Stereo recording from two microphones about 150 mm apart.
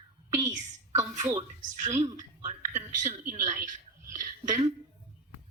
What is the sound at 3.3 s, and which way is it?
Speech, 55° right (ahead or behind).